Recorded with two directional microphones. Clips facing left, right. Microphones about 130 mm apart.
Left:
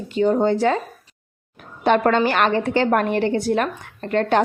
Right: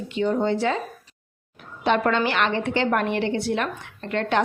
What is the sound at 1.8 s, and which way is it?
A woman's voice, 50° left (ahead or behind).